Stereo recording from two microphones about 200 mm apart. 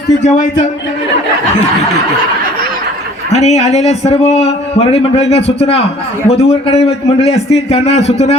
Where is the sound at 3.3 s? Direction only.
35° left (ahead or behind).